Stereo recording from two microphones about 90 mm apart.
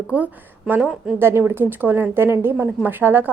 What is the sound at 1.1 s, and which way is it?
Speech, 25° right (ahead or behind).